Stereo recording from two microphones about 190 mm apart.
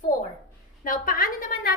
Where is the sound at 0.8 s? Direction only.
50° left (ahead or behind).